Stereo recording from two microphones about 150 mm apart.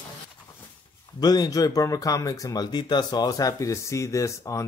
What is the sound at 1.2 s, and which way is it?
Speech, 25° left (ahead or behind).